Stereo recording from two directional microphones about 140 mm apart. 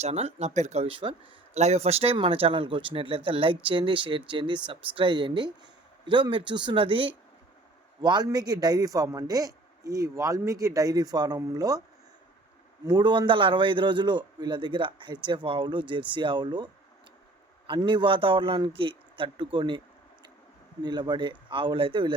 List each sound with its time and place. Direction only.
0.0 s speech: 50° right (ahead or behind)
1.5 s a man's voice: 50° right (ahead or behind); by 11.8 s 25° right (ahead or behind)
12.8 s a man's voice: 30° right (ahead or behind)
17.7 s a man's voice: 35° right (ahead or behind)
20.8 s a man's voice: 30° right (ahead or behind)